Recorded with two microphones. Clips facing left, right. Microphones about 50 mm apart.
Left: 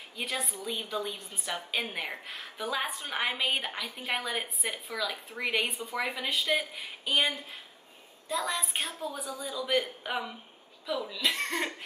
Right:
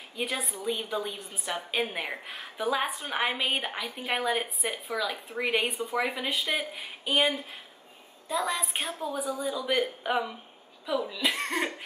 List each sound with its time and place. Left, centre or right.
0.1 s a woman's voice: centre